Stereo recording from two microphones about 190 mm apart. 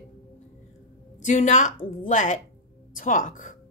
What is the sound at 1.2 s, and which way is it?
Speech, 40° left (ahead or behind).